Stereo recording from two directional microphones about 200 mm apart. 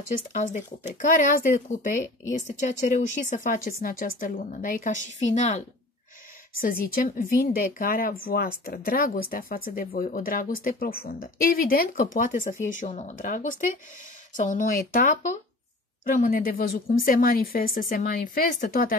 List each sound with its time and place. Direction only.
0.3 s speech: 40° left (ahead or behind)
6.5 s a woman's voice: 45° left (ahead or behind)